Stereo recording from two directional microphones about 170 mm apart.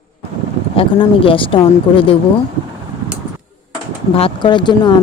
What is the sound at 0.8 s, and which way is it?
Speech, 30° left (ahead or behind).